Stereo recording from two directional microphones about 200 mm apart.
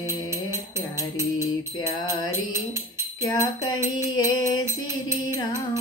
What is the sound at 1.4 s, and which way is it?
Music, 20° left (ahead or behind).